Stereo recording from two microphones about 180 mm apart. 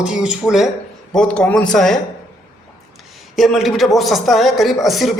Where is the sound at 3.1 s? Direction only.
Centre (ahead or behind).